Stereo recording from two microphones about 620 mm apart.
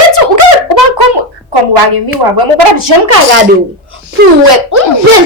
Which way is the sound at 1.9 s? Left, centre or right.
Right.